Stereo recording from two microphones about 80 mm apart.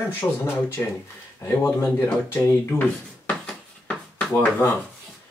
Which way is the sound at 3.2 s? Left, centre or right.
Centre.